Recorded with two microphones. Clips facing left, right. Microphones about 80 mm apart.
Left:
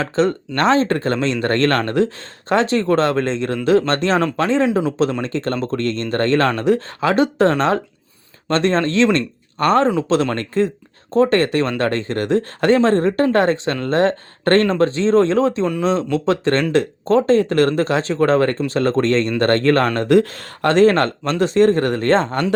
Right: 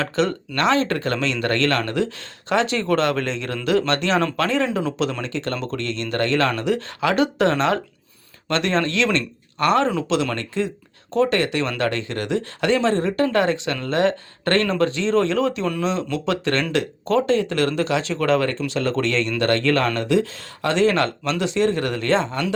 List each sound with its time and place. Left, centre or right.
0.0 s speech: left
20.1 s speech: left